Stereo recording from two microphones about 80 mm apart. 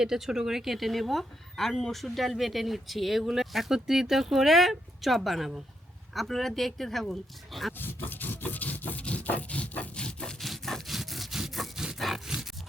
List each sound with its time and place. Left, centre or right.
0.0 s a woman's voice: centre
7.8 s rub: left
10.4 s sawing: centre